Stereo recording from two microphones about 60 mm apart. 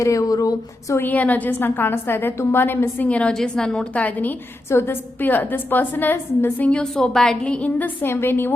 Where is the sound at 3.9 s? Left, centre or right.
Left.